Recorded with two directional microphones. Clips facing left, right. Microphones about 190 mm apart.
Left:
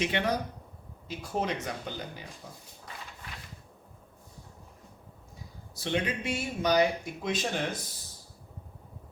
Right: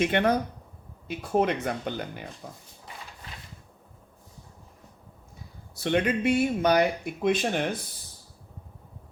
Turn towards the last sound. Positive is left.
turn(degrees=-60)  # may be behind; listen again after turning